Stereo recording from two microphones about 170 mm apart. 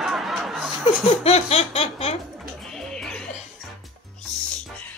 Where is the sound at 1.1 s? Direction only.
40° left (ahead or behind).